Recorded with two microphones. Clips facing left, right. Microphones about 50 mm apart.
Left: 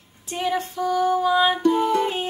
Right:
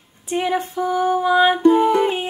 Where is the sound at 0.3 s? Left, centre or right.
Centre.